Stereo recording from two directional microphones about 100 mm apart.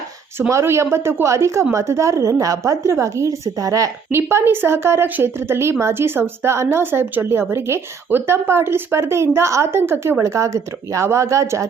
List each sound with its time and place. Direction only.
0.3 s a woman's voice: 25° right (ahead or behind)
4.1 s a woman's voice: 25° right (ahead or behind)